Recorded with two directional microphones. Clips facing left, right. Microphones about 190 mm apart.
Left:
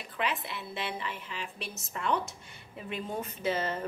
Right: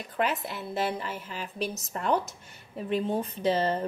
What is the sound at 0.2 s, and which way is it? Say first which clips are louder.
A woman's voice: right 5 dB; 45° right (ahead or behind).